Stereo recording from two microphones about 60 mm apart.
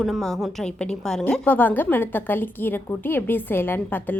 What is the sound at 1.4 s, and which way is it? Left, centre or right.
A woman's voice, left.